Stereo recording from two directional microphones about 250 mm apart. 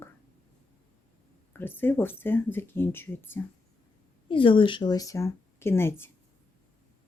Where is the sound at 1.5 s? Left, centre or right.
Centre.